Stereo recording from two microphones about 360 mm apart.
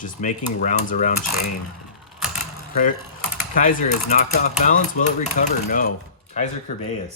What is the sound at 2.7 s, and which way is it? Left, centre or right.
Speech, left.